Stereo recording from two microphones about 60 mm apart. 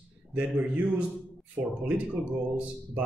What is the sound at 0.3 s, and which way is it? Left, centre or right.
Speech, right.